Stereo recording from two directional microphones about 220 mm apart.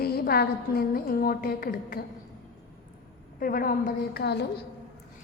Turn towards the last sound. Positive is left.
turn(degrees=45)  # may be behind; listen again after turning